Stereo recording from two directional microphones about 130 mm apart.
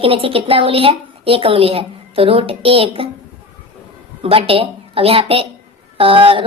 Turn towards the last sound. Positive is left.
turn(degrees=-45)  # may be behind; listen again after turning